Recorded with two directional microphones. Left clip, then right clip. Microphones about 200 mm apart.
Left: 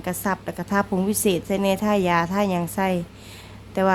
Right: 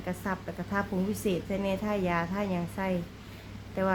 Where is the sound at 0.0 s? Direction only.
55° left (ahead or behind).